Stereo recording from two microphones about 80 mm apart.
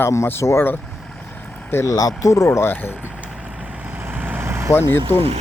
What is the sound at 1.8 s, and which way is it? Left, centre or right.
Speech, left.